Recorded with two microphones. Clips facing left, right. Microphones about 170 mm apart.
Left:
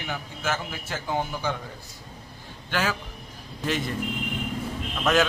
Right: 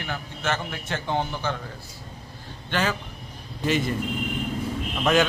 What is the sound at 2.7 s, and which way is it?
Speech, 5° left (ahead or behind).